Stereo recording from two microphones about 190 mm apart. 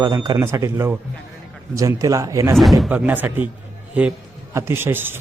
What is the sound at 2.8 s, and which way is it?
Speech, 5° right (ahead or behind).